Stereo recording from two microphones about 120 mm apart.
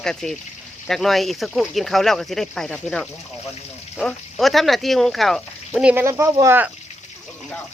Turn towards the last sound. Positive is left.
turn(degrees=-20)  # may be behind; listen again after turning